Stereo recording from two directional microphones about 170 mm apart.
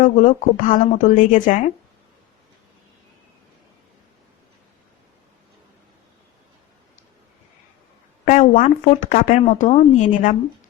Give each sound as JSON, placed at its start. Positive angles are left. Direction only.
{"t": 0.0, "sound": "speech", "side_deg": 45}
{"t": 8.2, "sound": "speech", "side_deg": 45}